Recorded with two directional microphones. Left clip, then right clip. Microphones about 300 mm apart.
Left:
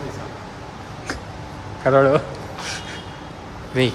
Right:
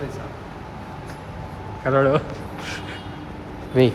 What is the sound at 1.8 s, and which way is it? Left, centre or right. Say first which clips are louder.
Speech: left 3 dB; centre.